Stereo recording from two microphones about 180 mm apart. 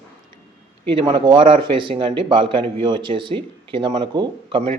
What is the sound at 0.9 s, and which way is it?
Speech, 30° right (ahead or behind).